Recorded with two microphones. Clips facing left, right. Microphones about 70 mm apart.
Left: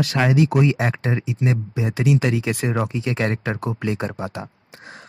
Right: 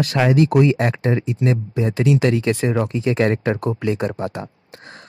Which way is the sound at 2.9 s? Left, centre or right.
Centre.